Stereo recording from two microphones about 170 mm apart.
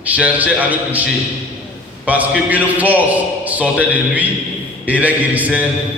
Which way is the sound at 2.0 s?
10° right (ahead or behind).